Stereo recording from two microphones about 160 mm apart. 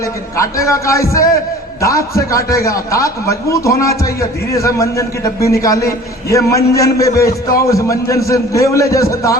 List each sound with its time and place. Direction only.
0.0 s a man's voice: 20° left (ahead or behind)